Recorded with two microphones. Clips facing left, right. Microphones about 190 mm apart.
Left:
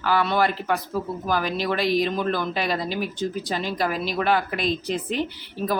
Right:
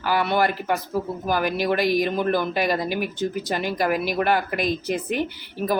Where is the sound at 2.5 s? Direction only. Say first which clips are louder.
Right 3 dB; 50° right (ahead or behind).